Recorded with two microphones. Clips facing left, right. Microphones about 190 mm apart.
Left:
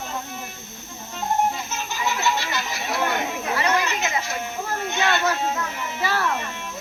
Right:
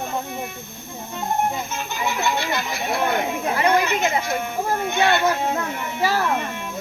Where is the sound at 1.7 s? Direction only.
55° right (ahead or behind).